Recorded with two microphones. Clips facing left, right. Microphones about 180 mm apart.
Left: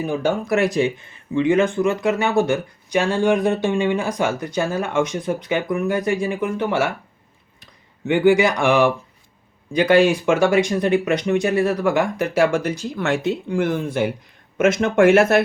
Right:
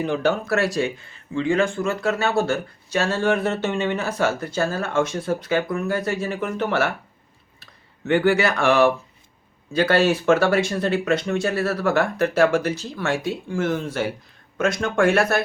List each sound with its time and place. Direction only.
0.0 s speech: 10° left (ahead or behind)
14.6 s speech: 20° left (ahead or behind)